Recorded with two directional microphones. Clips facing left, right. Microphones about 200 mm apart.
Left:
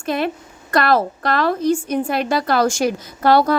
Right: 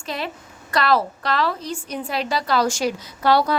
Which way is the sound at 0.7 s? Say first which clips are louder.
Left 3 dB; 50° left (ahead or behind).